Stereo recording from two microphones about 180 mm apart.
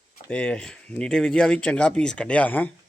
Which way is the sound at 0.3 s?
5° left (ahead or behind).